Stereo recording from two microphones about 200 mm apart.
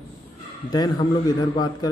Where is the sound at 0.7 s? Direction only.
20° left (ahead or behind).